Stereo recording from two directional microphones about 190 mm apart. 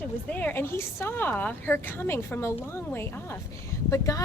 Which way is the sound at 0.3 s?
10° left (ahead or behind).